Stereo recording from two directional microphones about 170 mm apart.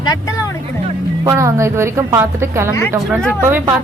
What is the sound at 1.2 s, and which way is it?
A woman's voice, 15° right (ahead or behind).